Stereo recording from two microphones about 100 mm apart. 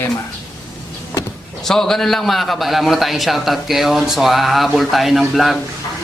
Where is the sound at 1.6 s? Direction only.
5° left (ahead or behind).